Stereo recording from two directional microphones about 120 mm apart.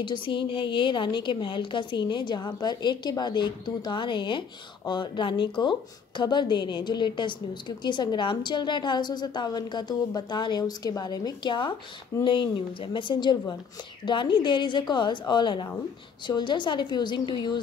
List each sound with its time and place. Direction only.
0.0 s a woman's voice: 40° left (ahead or behind)